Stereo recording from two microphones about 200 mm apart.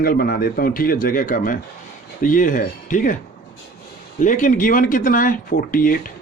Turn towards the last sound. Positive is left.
turn(degrees=45)  # may be behind; listen again after turning